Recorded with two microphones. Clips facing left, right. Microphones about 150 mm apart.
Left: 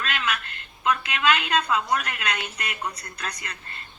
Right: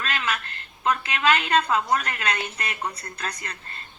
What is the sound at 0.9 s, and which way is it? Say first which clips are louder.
A woman's voice: right 1 dB; 30° right (ahead or behind).